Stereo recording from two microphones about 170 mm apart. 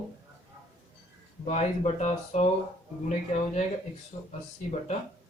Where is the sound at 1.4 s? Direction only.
40° left (ahead or behind).